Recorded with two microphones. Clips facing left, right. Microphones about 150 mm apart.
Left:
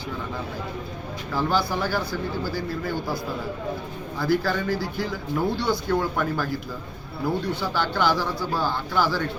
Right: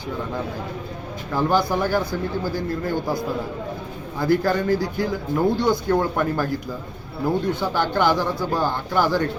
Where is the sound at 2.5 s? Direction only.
50° right (ahead or behind).